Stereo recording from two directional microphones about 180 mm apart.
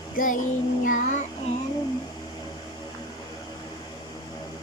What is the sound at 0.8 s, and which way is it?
Child singing, 45° left (ahead or behind).